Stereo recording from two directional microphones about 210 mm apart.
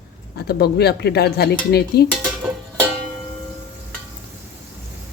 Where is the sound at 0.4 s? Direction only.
50° left (ahead or behind).